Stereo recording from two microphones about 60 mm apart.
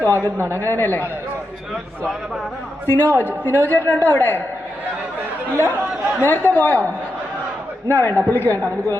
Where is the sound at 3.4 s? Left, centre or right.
Left.